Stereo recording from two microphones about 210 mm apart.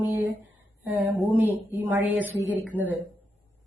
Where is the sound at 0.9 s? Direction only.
10° right (ahead or behind).